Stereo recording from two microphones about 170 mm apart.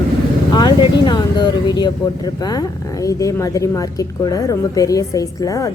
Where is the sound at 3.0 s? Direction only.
20° left (ahead or behind).